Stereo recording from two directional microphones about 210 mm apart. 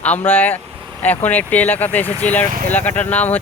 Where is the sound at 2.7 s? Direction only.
10° left (ahead or behind).